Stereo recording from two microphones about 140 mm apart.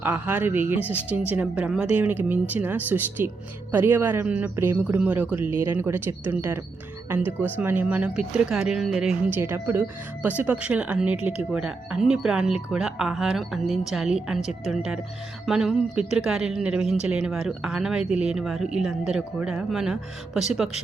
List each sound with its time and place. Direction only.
0.0 s speech: 15° right (ahead or behind)
7.3 s speech: 10° left (ahead or behind)
7.6 s speech: 15° right (ahead or behind)
9.3 s speech: 20° right (ahead or behind)